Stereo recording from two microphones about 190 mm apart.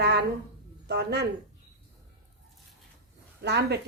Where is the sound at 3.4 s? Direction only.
60° right (ahead or behind).